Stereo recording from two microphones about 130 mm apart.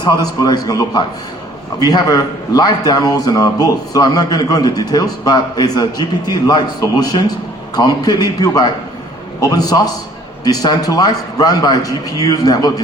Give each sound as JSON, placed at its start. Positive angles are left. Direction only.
{"t": 0.0, "sound": "a man's voice", "side_deg": 30}